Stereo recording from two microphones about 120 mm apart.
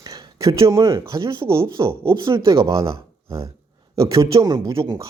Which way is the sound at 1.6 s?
45° right (ahead or behind).